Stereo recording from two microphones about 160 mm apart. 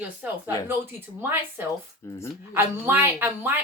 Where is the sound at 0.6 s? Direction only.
15° right (ahead or behind).